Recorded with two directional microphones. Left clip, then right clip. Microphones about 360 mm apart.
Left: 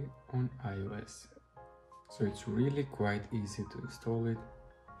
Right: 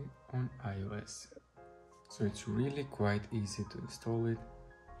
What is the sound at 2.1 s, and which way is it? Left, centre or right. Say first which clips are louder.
Speech: left 2 dB; right.